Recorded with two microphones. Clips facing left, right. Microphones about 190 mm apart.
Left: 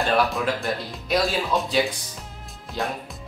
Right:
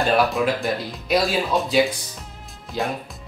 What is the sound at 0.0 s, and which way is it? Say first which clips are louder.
Speech: right 3 dB; centre (ahead or behind).